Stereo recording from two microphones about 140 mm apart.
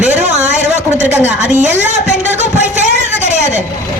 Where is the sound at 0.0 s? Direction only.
55° right (ahead or behind).